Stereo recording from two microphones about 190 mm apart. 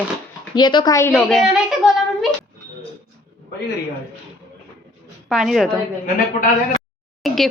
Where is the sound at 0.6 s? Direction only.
25° left (ahead or behind); by 2.4 s centre (ahead or behind).